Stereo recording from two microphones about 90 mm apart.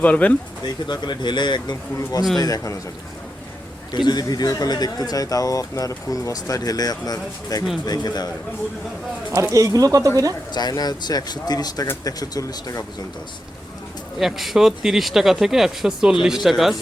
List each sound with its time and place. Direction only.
0.0 s speech: 15° left (ahead or behind)
0.6 s speech: 55° left (ahead or behind)
2.4 s speech: 40° left (ahead or behind)
3.9 s speech: 55° left (ahead or behind)
9.3 s speech: 40° right (ahead or behind)
10.5 s speech: 50° left (ahead or behind)
14.2 s speech: centre (ahead or behind)